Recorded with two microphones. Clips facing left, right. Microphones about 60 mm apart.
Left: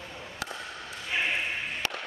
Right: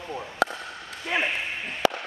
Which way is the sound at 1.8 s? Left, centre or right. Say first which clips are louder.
Right 14 dB; right.